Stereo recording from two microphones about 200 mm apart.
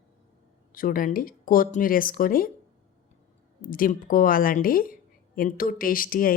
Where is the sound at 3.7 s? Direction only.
45° left (ahead or behind).